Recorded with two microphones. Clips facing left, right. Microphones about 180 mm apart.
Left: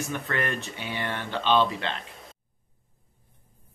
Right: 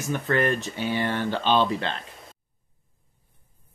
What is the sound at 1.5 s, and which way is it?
Speech, centre (ahead or behind).